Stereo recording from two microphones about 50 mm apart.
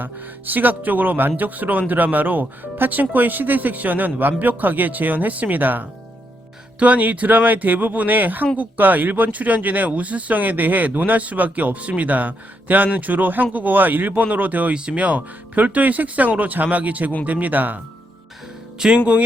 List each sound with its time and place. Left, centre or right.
0.0 s speech: right
14.7 s speech: right
18.8 s speech: right